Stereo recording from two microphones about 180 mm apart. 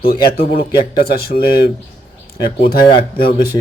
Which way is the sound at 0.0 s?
55° left (ahead or behind).